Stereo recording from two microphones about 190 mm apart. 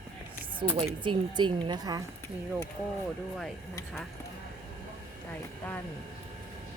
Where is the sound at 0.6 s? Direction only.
30° right (ahead or behind).